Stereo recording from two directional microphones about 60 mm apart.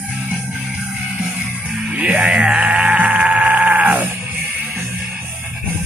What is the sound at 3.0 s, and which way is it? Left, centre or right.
Music, right.